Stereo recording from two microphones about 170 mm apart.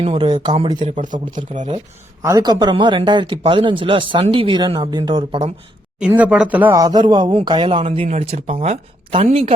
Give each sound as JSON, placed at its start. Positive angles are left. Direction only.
{"t": 0.0, "sound": "speech", "side_deg": -30}
{"t": 1.0, "sound": "speech", "side_deg": -50}
{"t": 2.2, "sound": "speech", "side_deg": -20}
{"t": 6.0, "sound": "speech", "side_deg": -10}